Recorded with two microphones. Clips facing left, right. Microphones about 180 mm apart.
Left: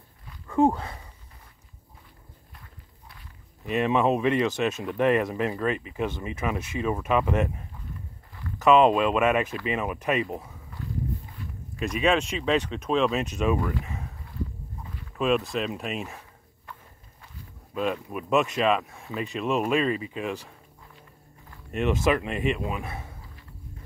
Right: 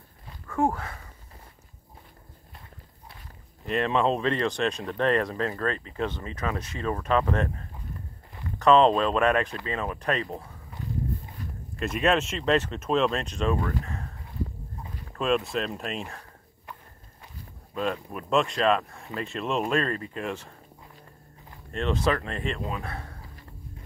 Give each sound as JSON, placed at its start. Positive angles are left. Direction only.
{"t": 0.5, "sound": "speech", "side_deg": 20}
{"t": 3.6, "sound": "speech", "side_deg": 10}
{"t": 11.4, "sound": "a sound", "side_deg": -40}
{"t": 11.7, "sound": "speech", "side_deg": 0}
{"t": 15.1, "sound": "speech", "side_deg": 0}
{"t": 17.7, "sound": "speech", "side_deg": 5}
{"t": 21.7, "sound": "speech", "side_deg": 10}